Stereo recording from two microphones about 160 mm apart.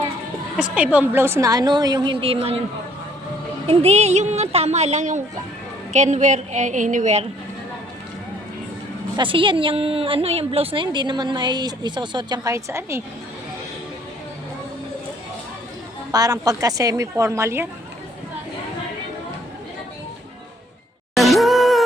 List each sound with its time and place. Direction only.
0.5 s a woman's voice: 5° right (ahead or behind); by 2.6 s 35° right (ahead or behind)
3.7 s a woman's voice: 40° right (ahead or behind)
9.1 s a woman's voice: 30° right (ahead or behind)
16.1 s a woman's voice: 20° right (ahead or behind)
21.2 s music: centre (ahead or behind)